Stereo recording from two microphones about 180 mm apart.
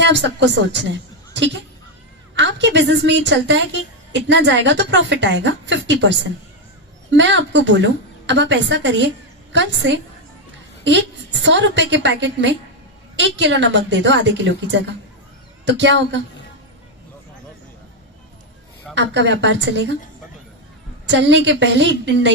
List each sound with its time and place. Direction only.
0.0 s a woman's voice: 80° right
18.9 s a woman's voice: 80° right
21.1 s a woman's voice: 80° right